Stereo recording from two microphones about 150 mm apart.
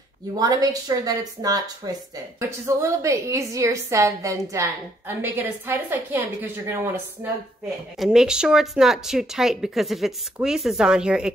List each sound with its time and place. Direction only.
0.3 s a woman's voice: 25° right (ahead or behind)
8.0 s speech: 5° right (ahead or behind)